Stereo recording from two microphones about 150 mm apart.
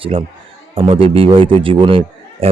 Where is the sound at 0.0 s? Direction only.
35° right (ahead or behind).